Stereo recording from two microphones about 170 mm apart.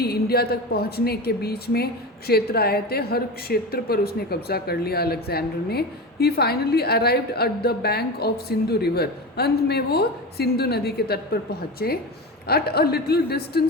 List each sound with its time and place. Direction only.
0.0 s a woman's voice: 65° left (ahead or behind)